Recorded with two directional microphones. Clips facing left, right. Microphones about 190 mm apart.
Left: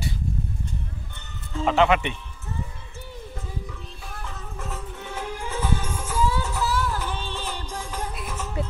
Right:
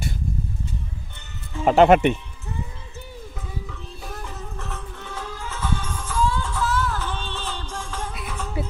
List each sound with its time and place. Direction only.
1.6 s speech: 45° right (ahead or behind)
4.6 s music: 10° left (ahead or behind)